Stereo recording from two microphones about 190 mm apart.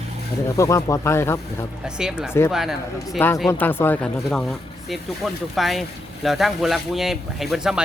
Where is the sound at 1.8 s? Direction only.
5° right (ahead or behind).